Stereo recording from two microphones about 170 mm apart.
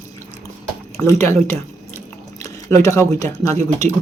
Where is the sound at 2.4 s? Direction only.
20° left (ahead or behind).